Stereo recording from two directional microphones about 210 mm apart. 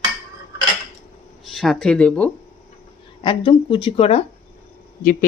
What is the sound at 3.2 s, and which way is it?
Speech, 25° left (ahead or behind).